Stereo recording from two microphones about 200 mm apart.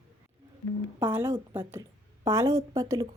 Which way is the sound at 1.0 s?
10° right (ahead or behind).